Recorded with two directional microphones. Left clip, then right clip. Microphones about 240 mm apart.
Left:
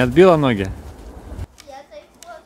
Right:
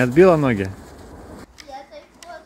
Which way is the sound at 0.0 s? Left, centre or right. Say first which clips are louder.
Left 1 dB; centre.